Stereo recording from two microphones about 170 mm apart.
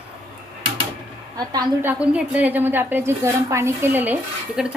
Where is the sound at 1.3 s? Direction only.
25° right (ahead or behind).